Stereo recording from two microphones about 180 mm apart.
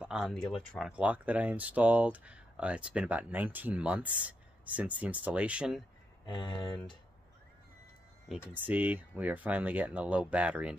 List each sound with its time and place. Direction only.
0.0 s speech: 5° right (ahead or behind)
6.2 s speech: 25° left (ahead or behind)
8.5 s speech: 10° right (ahead or behind)